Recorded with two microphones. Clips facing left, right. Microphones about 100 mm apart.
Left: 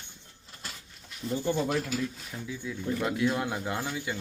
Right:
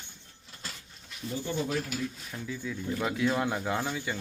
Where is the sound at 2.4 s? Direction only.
5° left (ahead or behind).